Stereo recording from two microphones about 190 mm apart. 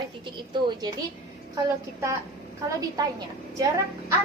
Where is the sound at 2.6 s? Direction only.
20° right (ahead or behind).